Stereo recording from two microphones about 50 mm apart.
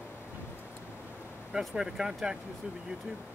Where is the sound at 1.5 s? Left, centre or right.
Centre.